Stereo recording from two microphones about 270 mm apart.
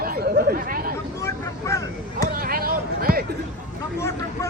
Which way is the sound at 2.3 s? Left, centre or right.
Right.